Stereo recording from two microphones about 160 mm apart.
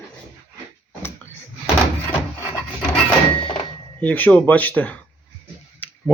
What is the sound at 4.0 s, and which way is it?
Speech, 10° left (ahead or behind).